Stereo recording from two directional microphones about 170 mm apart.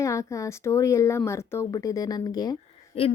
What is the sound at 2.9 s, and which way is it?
Speech, 35° left (ahead or behind).